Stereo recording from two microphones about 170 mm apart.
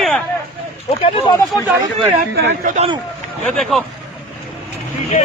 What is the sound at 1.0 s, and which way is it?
Speech, 30° left (ahead or behind).